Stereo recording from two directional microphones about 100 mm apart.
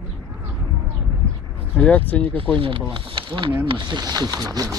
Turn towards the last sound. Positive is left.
turn(degrees=-40)  # may be behind; listen again after turning